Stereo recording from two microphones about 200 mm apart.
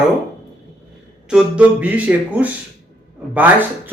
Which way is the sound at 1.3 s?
5° right (ahead or behind).